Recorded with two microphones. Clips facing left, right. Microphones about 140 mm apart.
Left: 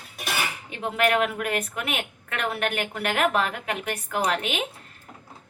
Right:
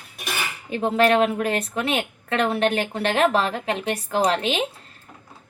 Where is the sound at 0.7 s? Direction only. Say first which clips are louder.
Right 6 dB; 35° right (ahead or behind).